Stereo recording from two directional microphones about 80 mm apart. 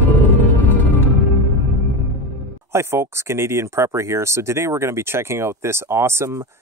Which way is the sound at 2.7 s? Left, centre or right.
Right.